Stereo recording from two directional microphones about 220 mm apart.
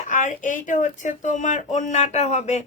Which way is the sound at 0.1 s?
35° left (ahead or behind).